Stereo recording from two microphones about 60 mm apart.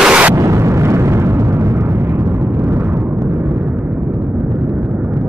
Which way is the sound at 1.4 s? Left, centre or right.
Right.